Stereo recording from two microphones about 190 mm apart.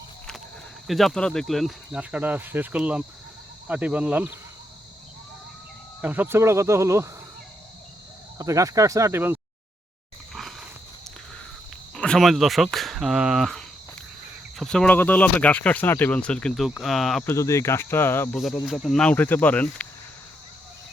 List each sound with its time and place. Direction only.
0.9 s speech: centre (ahead or behind)
6.0 s speech: 10° right (ahead or behind)
8.4 s speech: 15° right (ahead or behind)
10.3 s a sound: centre (ahead or behind)
11.9 s speech: 5° left (ahead or behind)
17.2 s speech: 15° left (ahead or behind)
18.3 s speech: centre (ahead or behind)